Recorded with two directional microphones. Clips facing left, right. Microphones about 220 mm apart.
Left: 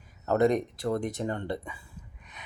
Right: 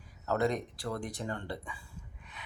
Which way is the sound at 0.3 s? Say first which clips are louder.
Left 7 dB; 20° left (ahead or behind).